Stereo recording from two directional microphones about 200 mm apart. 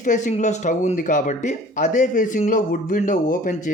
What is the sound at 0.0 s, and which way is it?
Speech, 40° left (ahead or behind).